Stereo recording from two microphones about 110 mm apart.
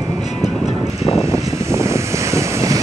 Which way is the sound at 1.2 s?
25° right (ahead or behind).